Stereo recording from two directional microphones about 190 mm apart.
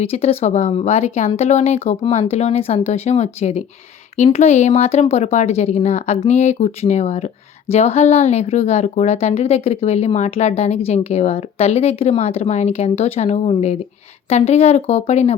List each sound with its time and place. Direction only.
0.0 s speech: 30° left (ahead or behind)